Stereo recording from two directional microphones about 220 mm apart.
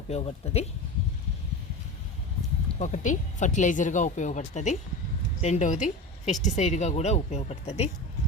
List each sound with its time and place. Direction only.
0.1 s speech: 30° left (ahead or behind)
2.7 s a woman's voice: 35° left (ahead or behind)